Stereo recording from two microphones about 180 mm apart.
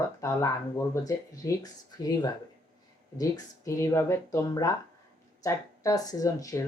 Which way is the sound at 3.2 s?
15° left (ahead or behind).